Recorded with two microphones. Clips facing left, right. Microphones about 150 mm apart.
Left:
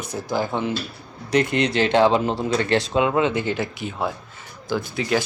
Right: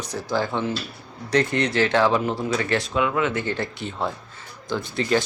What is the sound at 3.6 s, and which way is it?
Speech, 5° left (ahead or behind).